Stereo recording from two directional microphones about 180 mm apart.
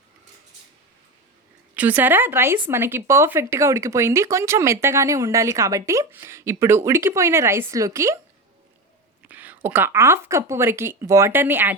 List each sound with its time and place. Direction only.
1.7 s speech: 10° right (ahead or behind)
9.2 s speech: 10° right (ahead or behind)